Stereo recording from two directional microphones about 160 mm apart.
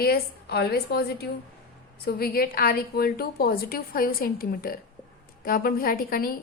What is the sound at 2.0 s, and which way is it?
A woman's voice, 70° left (ahead or behind).